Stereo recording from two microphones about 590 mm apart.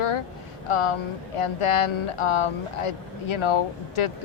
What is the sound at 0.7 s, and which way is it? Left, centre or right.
A woman's voice, left.